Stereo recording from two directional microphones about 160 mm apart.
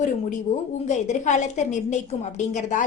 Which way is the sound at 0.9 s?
50° left (ahead or behind).